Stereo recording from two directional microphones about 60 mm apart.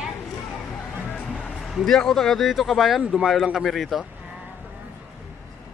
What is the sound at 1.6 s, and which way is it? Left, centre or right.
Speech, centre.